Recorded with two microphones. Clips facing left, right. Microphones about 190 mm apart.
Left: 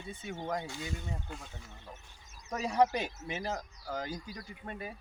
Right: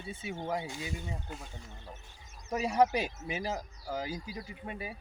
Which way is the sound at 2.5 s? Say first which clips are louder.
Right 1 dB; 10° right (ahead or behind).